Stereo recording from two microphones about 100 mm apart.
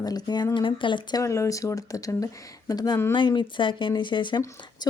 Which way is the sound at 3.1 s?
55° left (ahead or behind).